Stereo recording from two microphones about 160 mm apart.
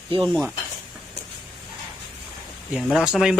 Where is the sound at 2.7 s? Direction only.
Centre (ahead or behind).